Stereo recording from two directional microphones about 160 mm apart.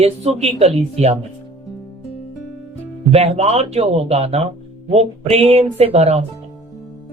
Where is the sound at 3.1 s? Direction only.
40° right (ahead or behind).